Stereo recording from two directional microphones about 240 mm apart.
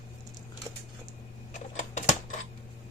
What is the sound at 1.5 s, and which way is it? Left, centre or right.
Typewriter, left.